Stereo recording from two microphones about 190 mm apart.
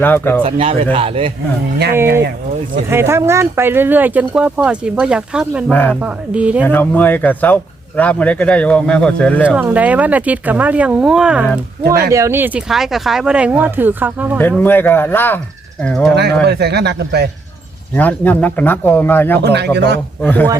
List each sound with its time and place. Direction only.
0.0 s speech: 10° left (ahead or behind)
0.4 s a man's voice: 30° right (ahead or behind)
2.9 s speech: 15° right (ahead or behind)
5.7 s speech: 10° left (ahead or behind)
6.0 s speech: 5° right (ahead or behind)
6.7 s speech: 10° left (ahead or behind)
9.6 s speech: 5° right (ahead or behind)
11.8 s speech: 55° right (ahead or behind)
12.1 s speech: 15° right (ahead or behind)
14.6 s speech: 10° left (ahead or behind)
16.4 s speech: 60° right (ahead or behind)
17.9 s speech: 10° left (ahead or behind)
19.4 s speech: 60° right (ahead or behind)
20.2 s speech: 10° left (ahead or behind)